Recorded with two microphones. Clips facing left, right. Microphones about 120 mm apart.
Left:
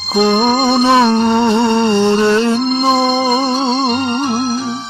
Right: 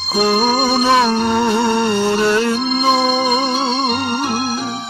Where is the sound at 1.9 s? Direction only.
30° left (ahead or behind).